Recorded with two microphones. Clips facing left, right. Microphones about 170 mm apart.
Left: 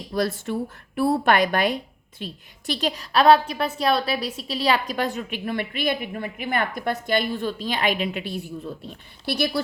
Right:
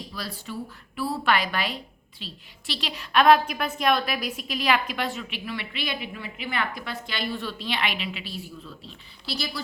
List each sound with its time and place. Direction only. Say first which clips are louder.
0.1 s a woman's voice: left 15 dB; 50° left (ahead or behind); by 5.0 s 35° left (ahead or behind)
5.1 s a woman's voice: left 6 dB; 50° left (ahead or behind)